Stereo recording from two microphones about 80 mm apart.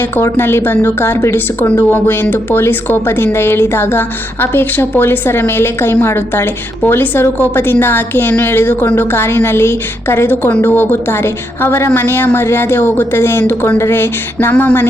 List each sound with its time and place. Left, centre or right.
0.2 s a woman's voice: left